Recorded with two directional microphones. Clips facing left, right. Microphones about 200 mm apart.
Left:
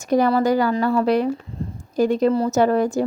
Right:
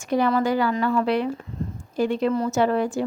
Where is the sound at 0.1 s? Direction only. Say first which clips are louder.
Left 4 dB; 40° left (ahead or behind).